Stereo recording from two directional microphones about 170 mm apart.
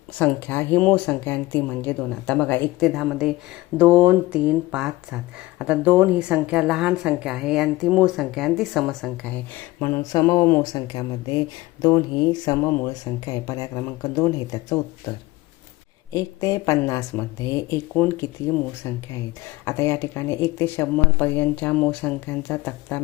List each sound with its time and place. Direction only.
0.2 s speech: 10° left (ahead or behind)
2.9 s speech: 5° right (ahead or behind); by 12.5 s 25° left (ahead or behind)
12.6 s speech: 15° left (ahead or behind)
16.1 s speech: 20° left (ahead or behind)